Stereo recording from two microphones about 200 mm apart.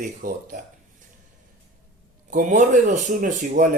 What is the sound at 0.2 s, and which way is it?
Speech, 45° right (ahead or behind).